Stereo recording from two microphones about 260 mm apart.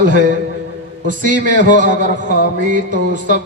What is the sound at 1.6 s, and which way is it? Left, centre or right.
A man's voice, right.